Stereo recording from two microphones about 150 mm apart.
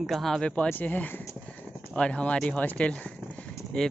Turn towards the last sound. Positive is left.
turn(degrees=5)  # may be behind; listen again after turning